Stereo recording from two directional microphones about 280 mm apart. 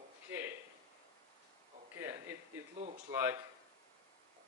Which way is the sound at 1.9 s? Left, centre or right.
Centre.